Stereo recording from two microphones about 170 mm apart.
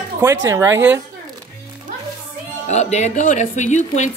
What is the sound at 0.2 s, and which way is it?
Speech, 20° right (ahead or behind).